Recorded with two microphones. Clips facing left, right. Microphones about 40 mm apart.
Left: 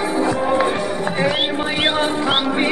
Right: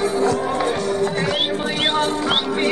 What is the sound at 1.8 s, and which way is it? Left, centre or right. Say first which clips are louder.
Music: left 1 dB; centre.